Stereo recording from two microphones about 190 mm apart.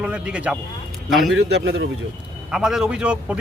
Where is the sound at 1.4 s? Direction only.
65° right (ahead or behind).